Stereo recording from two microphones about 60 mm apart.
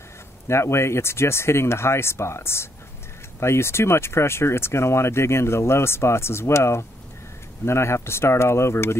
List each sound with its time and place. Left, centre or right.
0.5 s speech: left